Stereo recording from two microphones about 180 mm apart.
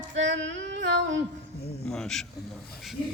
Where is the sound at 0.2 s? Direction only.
90° right.